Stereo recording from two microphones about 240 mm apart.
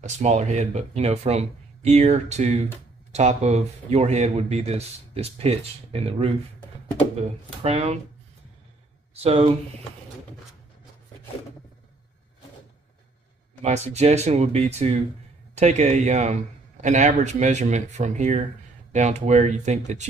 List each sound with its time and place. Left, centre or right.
0.0 s speech: right
7.6 s speech: right
9.1 s speech: right
13.6 s speech: right